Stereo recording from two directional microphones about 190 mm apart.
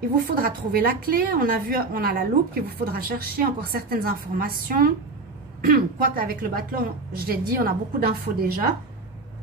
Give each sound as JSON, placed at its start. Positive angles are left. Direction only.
{"t": 0.2, "sound": "a woman's voice", "side_deg": -50}